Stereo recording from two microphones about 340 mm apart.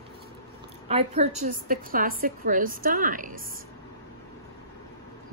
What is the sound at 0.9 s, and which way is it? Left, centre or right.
A woman's voice, centre.